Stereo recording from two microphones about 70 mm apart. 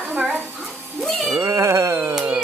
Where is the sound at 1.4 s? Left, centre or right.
Right.